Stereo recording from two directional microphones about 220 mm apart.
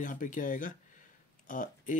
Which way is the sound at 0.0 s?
35° left (ahead or behind).